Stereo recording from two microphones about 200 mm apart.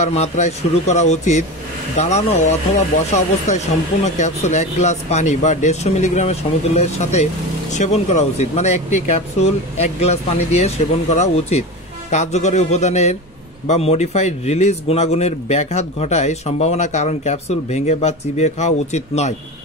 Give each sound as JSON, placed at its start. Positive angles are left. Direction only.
{"t": 0.0, "sound": "a man's voice", "side_deg": 35}